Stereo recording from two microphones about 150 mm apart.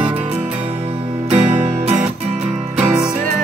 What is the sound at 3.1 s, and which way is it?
Music, 45° right (ahead or behind).